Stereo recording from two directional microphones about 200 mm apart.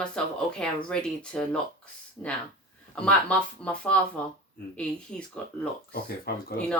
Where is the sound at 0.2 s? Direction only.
5° left (ahead or behind).